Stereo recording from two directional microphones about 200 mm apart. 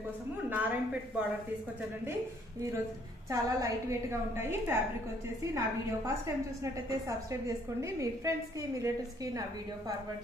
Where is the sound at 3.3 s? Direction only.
15° right (ahead or behind).